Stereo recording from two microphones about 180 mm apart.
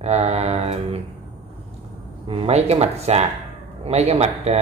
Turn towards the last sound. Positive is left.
turn(degrees=-35)  # may be behind; listen again after turning